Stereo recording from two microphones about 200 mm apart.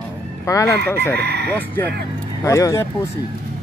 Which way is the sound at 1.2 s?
55° right (ahead or behind).